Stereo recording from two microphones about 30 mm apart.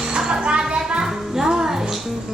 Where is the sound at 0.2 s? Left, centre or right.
Centre.